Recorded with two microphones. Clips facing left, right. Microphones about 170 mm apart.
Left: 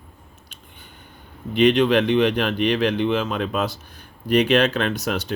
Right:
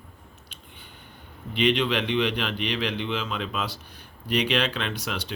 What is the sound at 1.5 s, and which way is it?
Speech, 45° left (ahead or behind).